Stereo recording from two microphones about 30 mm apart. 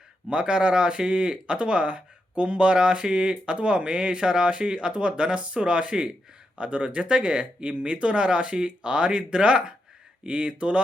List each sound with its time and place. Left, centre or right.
0.3 s speech: right